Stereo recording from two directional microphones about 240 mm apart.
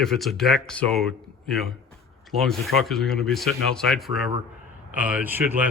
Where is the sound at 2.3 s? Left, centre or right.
Centre.